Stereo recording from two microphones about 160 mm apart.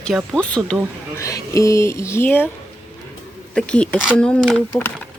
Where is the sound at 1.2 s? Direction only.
20° left (ahead or behind).